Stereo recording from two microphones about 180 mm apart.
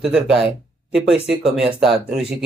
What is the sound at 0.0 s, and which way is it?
Speech, 5° right (ahead or behind).